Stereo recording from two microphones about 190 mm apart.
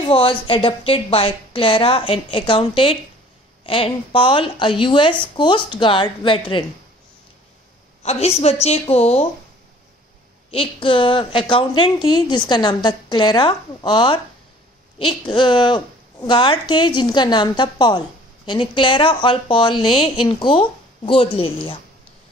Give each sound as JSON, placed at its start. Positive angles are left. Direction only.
{"t": 0.1, "sound": "a woman's voice", "side_deg": 30}
{"t": 8.0, "sound": "a woman's voice", "side_deg": 35}
{"t": 10.5, "sound": "a woman's voice", "side_deg": 30}